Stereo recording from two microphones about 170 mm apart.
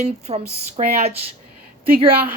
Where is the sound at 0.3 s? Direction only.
40° right (ahead or behind).